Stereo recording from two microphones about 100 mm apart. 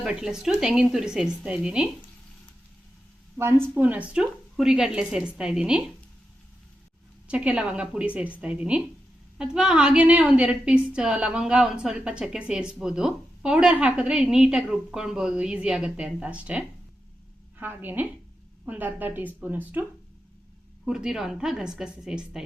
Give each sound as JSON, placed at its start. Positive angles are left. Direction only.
{"t": 0.0, "sound": "a woman's voice", "side_deg": -5}
{"t": 3.3, "sound": "a woman's voice", "side_deg": -25}
{"t": 7.3, "sound": "a woman's voice", "side_deg": -10}
{"t": 20.8, "sound": "a woman's voice", "side_deg": -5}